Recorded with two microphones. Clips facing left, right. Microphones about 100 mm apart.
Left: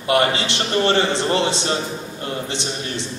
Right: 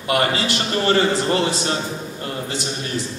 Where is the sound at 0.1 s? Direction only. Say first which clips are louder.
Left 1 dB; 25° left (ahead or behind).